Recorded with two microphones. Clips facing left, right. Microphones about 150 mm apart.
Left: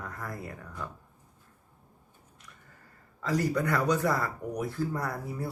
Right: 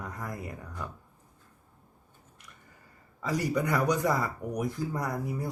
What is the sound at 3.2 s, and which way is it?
Speech, 15° right (ahead or behind).